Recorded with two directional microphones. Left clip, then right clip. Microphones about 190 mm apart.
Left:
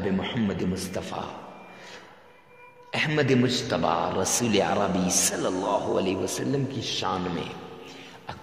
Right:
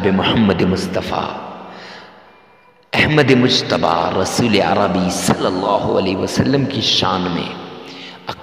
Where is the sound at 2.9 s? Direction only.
35° right (ahead or behind).